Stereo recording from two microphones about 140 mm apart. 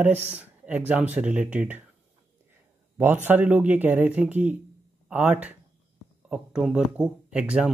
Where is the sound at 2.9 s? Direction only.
15° right (ahead or behind).